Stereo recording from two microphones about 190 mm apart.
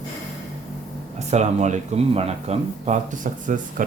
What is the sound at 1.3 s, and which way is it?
Speech, 35° right (ahead or behind).